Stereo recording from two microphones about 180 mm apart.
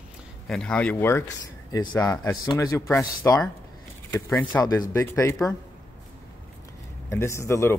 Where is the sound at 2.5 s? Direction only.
15° left (ahead or behind).